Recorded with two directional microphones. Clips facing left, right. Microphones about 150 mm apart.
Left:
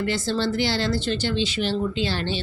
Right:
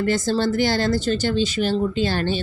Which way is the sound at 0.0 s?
45° right (ahead or behind).